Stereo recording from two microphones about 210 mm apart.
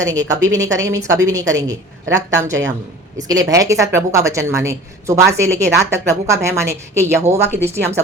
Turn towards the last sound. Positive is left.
turn(degrees=-10)  # may be behind; listen again after turning